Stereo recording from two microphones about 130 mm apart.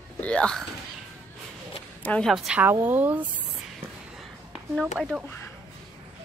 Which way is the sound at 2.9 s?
15° right (ahead or behind).